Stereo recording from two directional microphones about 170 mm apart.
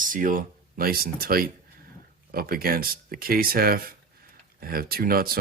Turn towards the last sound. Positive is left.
turn(degrees=-60)  # may be behind; listen again after turning